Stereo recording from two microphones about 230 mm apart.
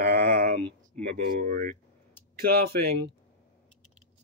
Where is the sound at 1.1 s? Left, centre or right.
Right.